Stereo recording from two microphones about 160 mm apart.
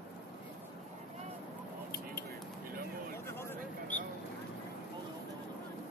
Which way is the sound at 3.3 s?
15° left (ahead or behind).